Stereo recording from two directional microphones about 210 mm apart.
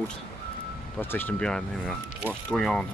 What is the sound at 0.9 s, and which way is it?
Speech, 10° left (ahead or behind).